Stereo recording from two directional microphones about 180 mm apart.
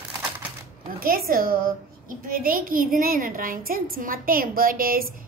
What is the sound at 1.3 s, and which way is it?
A woman's voice, 55° right (ahead or behind).